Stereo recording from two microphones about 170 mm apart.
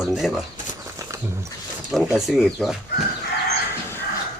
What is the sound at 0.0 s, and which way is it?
Speech, centre (ahead or behind).